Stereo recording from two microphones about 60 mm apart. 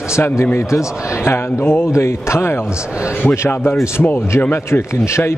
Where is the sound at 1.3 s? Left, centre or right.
Left.